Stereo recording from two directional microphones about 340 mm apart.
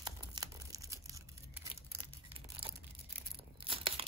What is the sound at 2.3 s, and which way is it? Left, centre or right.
Tearing, centre.